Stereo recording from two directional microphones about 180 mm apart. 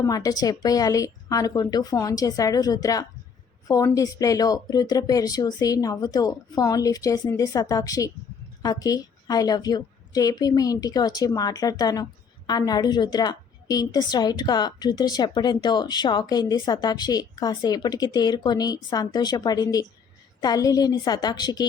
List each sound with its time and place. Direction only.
0.0 s a woman's voice: 20° left (ahead or behind)